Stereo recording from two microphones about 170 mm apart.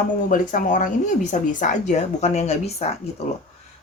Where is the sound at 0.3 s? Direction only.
50° left (ahead or behind).